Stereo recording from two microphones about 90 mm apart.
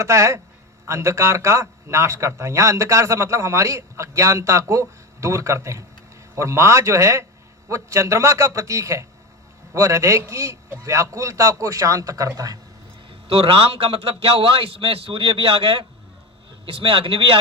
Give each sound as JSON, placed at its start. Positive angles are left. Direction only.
{"t": 0.0, "sound": "a man's voice", "side_deg": -35}
{"t": 13.1, "sound": "a man's voice", "side_deg": -90}